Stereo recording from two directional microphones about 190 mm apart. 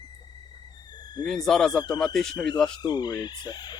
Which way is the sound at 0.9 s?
20° left (ahead or behind).